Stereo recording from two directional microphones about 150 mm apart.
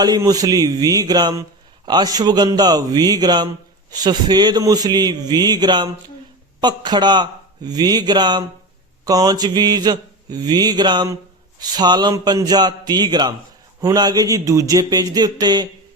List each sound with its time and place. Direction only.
0.0 s mantra: 25° right (ahead or behind)